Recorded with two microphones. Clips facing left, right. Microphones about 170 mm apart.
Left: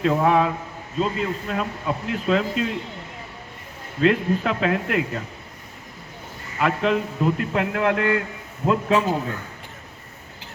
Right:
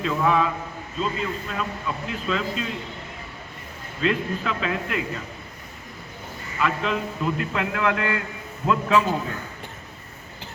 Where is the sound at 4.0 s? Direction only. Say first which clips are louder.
Left 5 dB; 55° left (ahead or behind).